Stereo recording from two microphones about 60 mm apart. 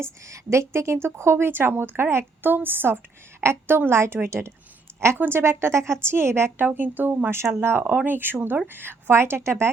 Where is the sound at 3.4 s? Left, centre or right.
Right.